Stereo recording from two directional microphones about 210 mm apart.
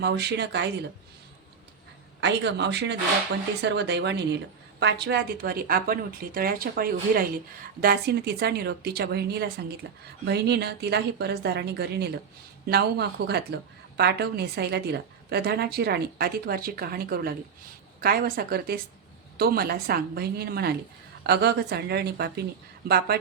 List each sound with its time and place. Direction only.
0.0 s a woman's voice: 50° right (ahead or behind)
2.2 s a woman's voice: 55° right (ahead or behind)